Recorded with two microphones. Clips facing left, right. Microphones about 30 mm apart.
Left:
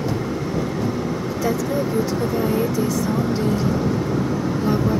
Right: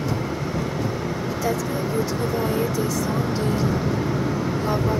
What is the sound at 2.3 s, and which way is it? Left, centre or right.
Speech, centre.